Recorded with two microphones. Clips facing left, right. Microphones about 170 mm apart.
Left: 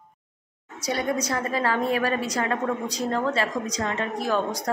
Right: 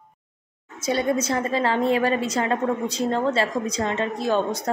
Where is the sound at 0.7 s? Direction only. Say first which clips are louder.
Right 4 dB; 25° right (ahead or behind).